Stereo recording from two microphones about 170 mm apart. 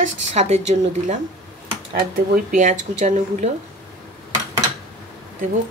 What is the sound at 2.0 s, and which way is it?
Speech, 55° right (ahead or behind).